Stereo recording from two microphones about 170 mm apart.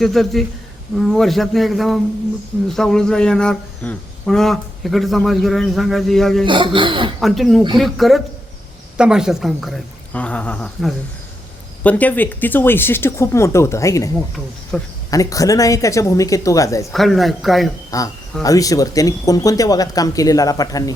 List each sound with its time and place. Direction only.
0.0 s speech: centre (ahead or behind)
6.4 s speech: 30° right (ahead or behind)
7.2 s speech: centre (ahead or behind); by 14.1 s 20° left (ahead or behind)
14.7 s speech: 5° left (ahead or behind)
15.1 s speech: 20° left (ahead or behind)
16.9 s speech: centre (ahead or behind)
17.9 s speech: 20° left (ahead or behind)